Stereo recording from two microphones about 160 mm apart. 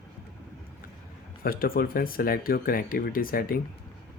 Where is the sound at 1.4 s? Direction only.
65° left (ahead or behind).